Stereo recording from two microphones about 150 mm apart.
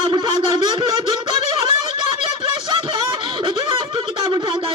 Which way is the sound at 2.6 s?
30° right (ahead or behind).